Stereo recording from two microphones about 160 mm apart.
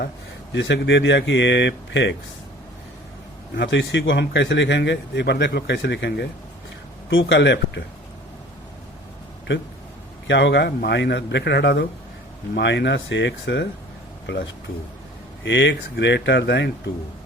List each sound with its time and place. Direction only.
0.5 s a man's voice: 90° left
3.5 s a man's voice: 90° left
7.3 s a man's voice: 90° left
10.2 s a man's voice: 90° left
15.4 s a man's voice: 90° left